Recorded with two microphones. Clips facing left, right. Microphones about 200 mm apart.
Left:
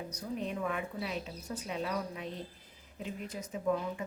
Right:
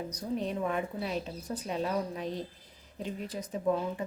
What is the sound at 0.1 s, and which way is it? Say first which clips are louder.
A woman's voice: right 3 dB; 35° right (ahead or behind).